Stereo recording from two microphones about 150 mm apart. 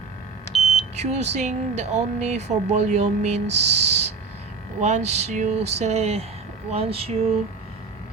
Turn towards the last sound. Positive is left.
turn(degrees=-40)  # may be behind; listen again after turning